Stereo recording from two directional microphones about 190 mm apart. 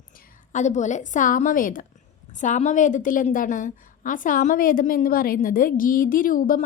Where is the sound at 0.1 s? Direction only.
45° left (ahead or behind).